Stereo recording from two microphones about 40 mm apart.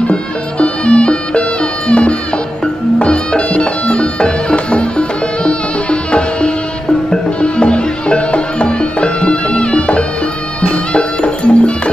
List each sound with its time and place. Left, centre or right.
0.1 s music: left